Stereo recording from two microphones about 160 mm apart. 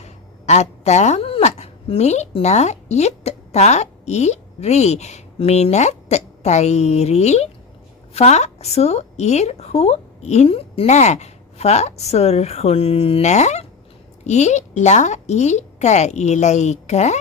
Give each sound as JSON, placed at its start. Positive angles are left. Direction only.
{"t": 0.0, "sound": "a woman's voice", "side_deg": 45}